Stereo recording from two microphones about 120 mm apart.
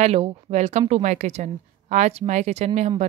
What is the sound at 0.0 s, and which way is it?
Speech, 60° right (ahead or behind).